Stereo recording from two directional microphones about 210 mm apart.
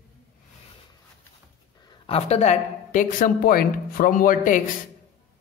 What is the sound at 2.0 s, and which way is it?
A woman's voice, 30° left (ahead or behind).